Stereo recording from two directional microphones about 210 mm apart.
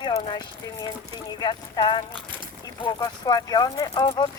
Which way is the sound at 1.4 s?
20° left (ahead or behind).